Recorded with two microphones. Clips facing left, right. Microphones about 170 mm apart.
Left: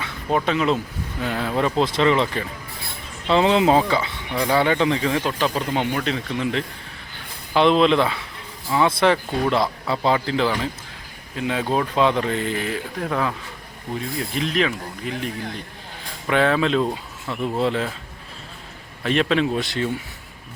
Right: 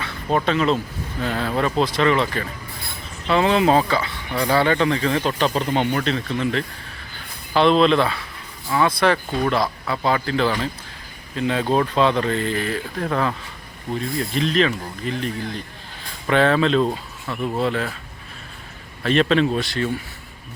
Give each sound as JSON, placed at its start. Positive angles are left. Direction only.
{"t": 0.3, "sound": "speech", "side_deg": 10}
{"t": 19.0, "sound": "speech", "side_deg": 10}